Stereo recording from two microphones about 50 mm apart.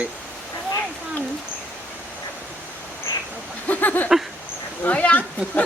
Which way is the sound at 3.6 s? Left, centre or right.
Left.